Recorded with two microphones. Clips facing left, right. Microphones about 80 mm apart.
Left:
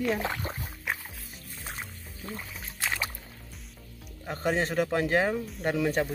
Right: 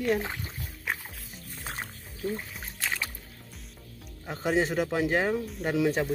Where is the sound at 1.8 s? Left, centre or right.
Right.